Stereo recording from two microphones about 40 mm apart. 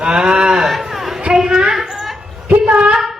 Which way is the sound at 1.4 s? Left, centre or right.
Centre.